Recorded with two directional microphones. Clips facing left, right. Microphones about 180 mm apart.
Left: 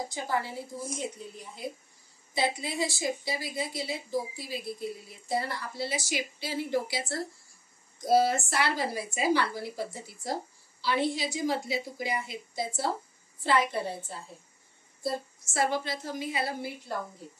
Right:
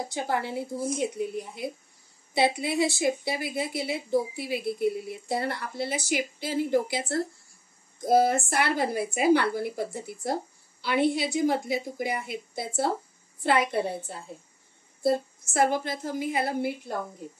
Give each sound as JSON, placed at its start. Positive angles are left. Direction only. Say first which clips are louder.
{"t": 0.1, "sound": "a woman's voice", "louder": "right 3 dB", "side_deg": -65}
{"t": 15.0, "sound": "a woman's voice", "louder": "right 8 dB", "side_deg": -50}